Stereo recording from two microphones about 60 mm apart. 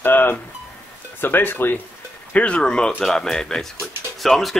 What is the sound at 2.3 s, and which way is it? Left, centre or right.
Speech, centre.